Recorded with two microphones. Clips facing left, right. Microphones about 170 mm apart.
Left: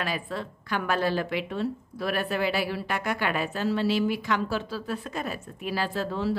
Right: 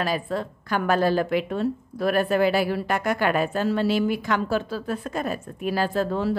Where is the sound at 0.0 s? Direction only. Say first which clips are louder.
Right 6 dB; 40° right (ahead or behind).